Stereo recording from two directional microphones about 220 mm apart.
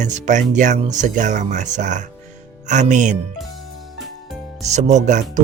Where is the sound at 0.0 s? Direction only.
35° right (ahead or behind).